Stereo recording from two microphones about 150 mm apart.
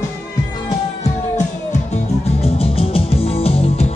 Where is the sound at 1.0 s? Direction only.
50° left (ahead or behind).